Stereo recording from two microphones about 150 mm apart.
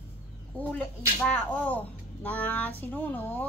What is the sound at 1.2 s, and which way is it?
A child's voice, 10° left (ahead or behind).